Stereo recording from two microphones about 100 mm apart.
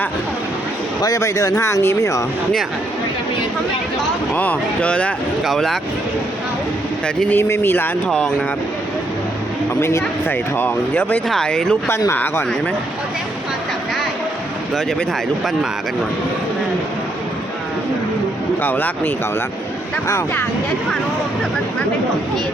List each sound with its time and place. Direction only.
1.0 s speech: 35° left (ahead or behind)
4.4 s speech: 15° left (ahead or behind)
5.5 s speech: centre (ahead or behind)
7.3 s speech: 25° left (ahead or behind)
8.0 s speech: 10° left (ahead or behind)
9.8 s speech: 20° left (ahead or behind)
11.3 s speech: 5° left (ahead or behind)
11.9 s speech: 30° left (ahead or behind)
18.6 s speech: 20° left (ahead or behind)